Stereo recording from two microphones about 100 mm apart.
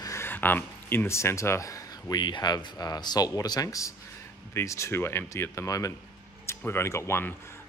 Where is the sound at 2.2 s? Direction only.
45° left (ahead or behind).